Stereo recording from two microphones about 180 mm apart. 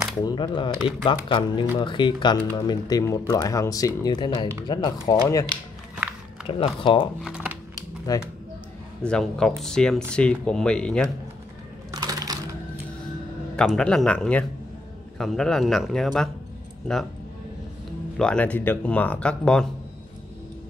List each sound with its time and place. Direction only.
0.2 s speech: 25° left (ahead or behind)
7.2 s speech: 5° right (ahead or behind)
8.1 s speech: 20° left (ahead or behind)
9.0 s speech: 5° left (ahead or behind)
11.9 s typing: 20° right (ahead or behind)
13.6 s speech: 5° left (ahead or behind)
18.1 s speech: 5° left (ahead or behind)